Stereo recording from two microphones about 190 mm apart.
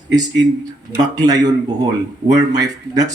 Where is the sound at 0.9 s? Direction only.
20° right (ahead or behind).